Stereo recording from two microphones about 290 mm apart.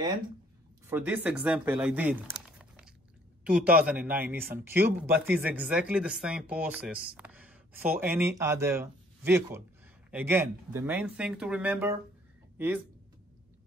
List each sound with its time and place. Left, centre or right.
0.8 s speech: centre